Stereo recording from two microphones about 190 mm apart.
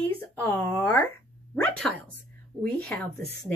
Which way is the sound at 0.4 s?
10° left (ahead or behind).